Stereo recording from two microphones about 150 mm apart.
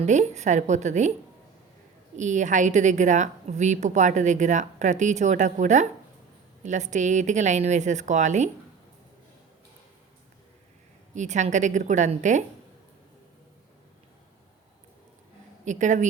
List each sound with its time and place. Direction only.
0.0 s a woman's voice: 50° right (ahead or behind)
2.1 s a woman's voice: 55° right (ahead or behind)
11.1 s a woman's voice: 55° right (ahead or behind)
15.6 s a woman's voice: 55° right (ahead or behind)